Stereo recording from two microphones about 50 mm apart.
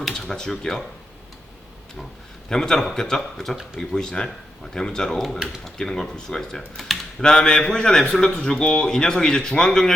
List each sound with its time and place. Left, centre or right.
0.0 s a man's voice: centre
2.5 s a man's voice: centre